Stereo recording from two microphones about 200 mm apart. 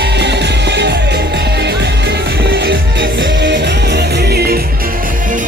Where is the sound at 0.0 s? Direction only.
60° right (ahead or behind).